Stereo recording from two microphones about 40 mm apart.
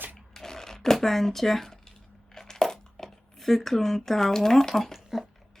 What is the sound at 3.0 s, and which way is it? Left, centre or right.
Speech, centre.